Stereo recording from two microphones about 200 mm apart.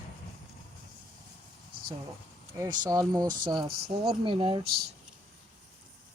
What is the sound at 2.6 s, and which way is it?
Speech, 20° right (ahead or behind).